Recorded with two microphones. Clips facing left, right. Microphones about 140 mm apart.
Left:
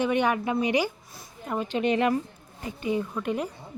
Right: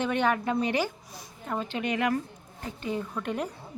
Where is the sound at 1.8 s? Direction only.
25° left (ahead or behind).